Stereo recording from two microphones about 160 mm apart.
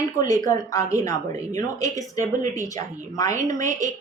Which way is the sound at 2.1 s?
50° right (ahead or behind).